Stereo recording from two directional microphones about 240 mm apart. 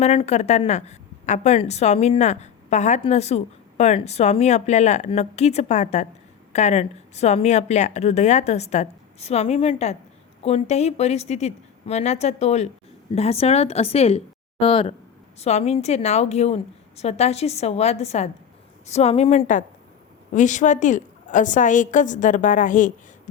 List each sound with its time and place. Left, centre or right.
0.0 s a woman's voice: left